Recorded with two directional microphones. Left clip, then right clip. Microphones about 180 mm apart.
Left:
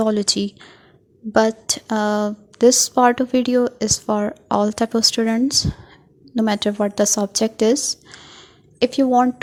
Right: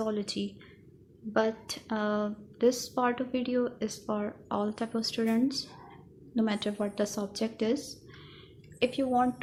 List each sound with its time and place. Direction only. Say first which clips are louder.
0.0 s a woman's voice: left 14 dB; 50° left (ahead or behind)